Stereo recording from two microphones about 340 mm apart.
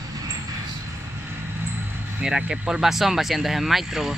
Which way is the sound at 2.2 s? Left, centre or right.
Centre.